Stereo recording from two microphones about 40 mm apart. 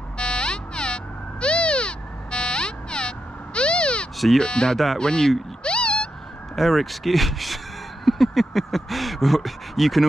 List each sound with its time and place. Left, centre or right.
0.2 s frog: left
4.4 s speech: centre
5.6 s cat: left
6.5 s speech: centre